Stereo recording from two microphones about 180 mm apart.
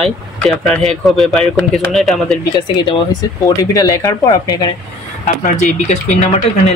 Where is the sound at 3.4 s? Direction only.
20° left (ahead or behind).